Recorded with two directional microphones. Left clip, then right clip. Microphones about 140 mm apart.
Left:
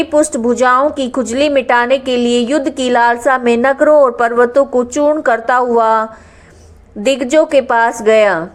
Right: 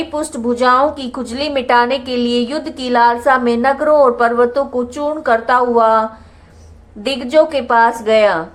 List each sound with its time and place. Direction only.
0.0 s a woman's voice: 25° left (ahead or behind)